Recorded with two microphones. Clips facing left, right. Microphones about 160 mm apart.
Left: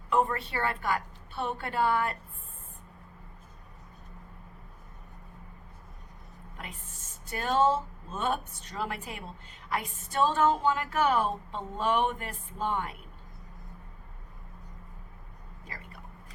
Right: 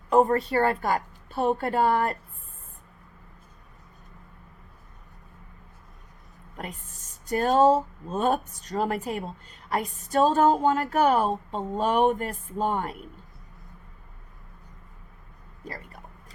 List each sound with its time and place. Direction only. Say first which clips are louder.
0.1 s a woman's voice: right 7 dB; 40° right (ahead or behind)
7.3 s a woman's voice: right 6 dB; 40° right (ahead or behind)
15.6 s speech: right 8 dB; 40° right (ahead or behind)